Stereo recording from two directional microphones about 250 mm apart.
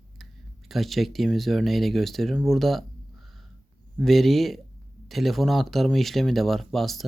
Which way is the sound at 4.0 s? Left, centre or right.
Centre.